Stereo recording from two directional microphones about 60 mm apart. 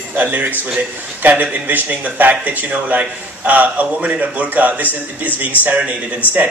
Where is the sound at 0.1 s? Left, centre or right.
Right.